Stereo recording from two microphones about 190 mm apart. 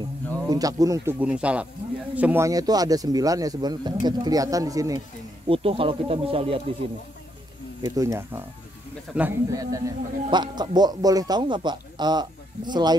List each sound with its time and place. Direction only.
0.5 s a man's voice: 20° right (ahead or behind)
5.5 s a man's voice: 30° right (ahead or behind)
7.8 s a man's voice: 20° right (ahead or behind)